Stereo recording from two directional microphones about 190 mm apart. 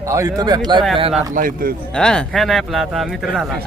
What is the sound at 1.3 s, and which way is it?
Speech, 45° right (ahead or behind).